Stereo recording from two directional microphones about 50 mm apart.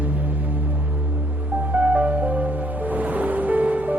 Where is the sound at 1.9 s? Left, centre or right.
Right.